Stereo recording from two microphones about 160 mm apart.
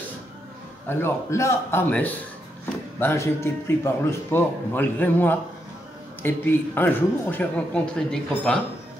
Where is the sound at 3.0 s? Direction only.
15° left (ahead or behind).